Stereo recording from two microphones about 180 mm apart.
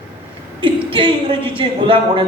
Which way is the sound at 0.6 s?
30° right (ahead or behind).